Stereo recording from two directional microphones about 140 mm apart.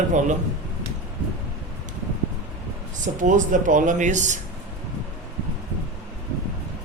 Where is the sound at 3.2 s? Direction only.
65° right (ahead or behind).